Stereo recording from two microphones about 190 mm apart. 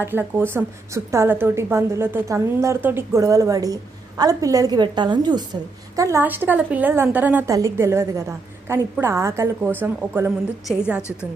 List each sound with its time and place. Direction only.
0.0 s a woman's voice: 10° right (ahead or behind)